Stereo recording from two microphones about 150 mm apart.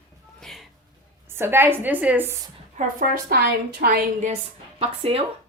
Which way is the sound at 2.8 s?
65° right (ahead or behind).